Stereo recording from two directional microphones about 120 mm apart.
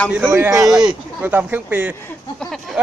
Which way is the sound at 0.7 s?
5° right (ahead or behind).